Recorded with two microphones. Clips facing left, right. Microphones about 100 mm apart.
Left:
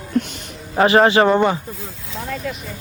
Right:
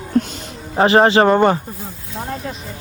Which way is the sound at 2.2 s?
35° right (ahead or behind).